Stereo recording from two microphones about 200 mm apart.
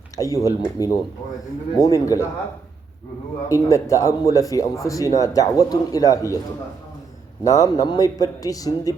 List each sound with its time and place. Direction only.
0.2 s speech: 15° left (ahead or behind)
3.5 s speech: 15° left (ahead or behind)
7.4 s speech: 15° left (ahead or behind)